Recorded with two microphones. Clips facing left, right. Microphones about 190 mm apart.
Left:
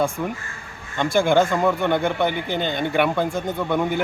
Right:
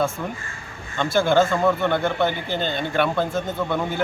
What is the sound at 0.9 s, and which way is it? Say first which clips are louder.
A man's voice: left 1 dB; 15° left (ahead or behind).